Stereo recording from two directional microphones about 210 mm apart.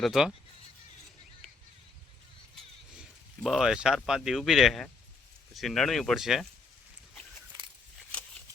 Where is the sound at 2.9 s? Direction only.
Centre (ahead or behind).